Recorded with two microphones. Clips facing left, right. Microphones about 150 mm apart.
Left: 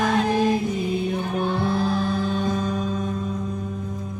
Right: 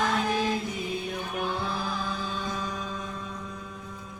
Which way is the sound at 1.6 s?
60° left (ahead or behind).